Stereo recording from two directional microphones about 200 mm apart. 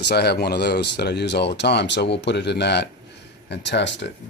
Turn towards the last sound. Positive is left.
turn(degrees=60)  # may be behind; listen again after turning